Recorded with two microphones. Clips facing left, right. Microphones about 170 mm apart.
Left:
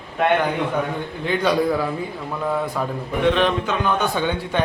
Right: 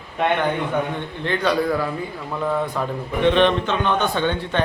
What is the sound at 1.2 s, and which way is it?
Speech, 10° left (ahead or behind).